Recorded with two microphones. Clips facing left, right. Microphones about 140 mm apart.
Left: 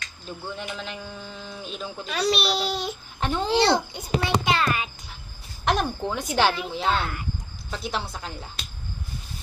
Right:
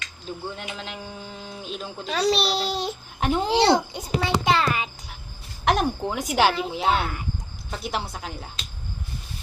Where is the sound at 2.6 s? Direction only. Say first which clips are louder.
Right 1 dB; 90° right.